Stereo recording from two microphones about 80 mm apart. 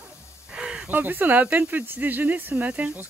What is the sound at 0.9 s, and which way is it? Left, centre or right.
Speech, right.